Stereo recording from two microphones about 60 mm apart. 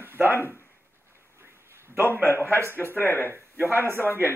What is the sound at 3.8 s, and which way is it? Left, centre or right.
Speech, right.